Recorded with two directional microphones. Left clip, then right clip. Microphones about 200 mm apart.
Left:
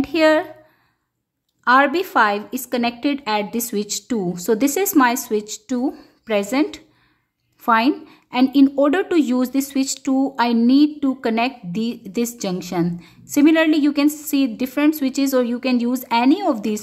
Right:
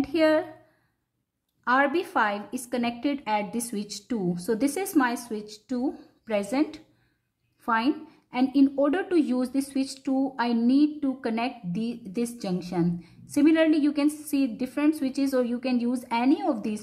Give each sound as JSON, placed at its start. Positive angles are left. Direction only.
{"t": 0.0, "sound": "a woman's voice", "side_deg": 20}
{"t": 1.6, "sound": "a woman's voice", "side_deg": 25}